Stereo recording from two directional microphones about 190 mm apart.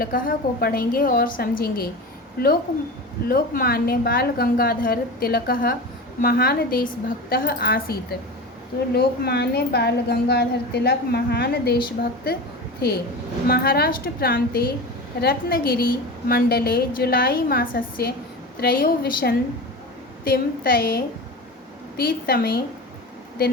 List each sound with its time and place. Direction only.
0.0 s a woman's voice: 50° left (ahead or behind)
9.0 s a woman's voice: 60° left (ahead or behind)